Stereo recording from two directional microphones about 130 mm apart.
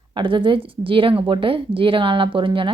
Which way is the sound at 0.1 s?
40° right (ahead or behind).